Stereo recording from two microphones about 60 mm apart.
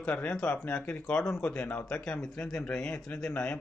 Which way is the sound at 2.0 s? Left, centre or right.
Centre.